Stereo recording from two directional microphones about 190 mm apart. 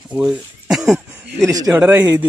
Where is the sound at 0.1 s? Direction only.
5° right (ahead or behind).